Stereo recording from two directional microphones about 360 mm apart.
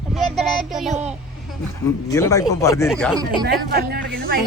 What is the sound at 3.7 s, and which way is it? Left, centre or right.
Speech, right.